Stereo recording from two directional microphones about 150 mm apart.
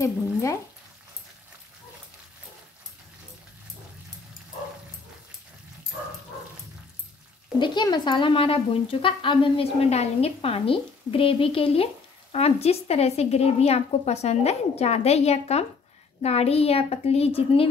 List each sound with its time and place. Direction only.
0.0 s speech: 20° left (ahead or behind)
7.5 s a woman's voice: 30° left (ahead or behind)